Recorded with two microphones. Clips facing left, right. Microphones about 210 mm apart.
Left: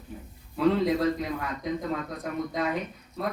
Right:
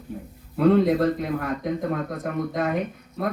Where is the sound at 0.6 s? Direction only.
55° right (ahead or behind).